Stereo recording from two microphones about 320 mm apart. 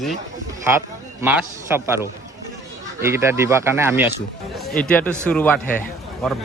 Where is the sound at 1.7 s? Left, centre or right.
Centre.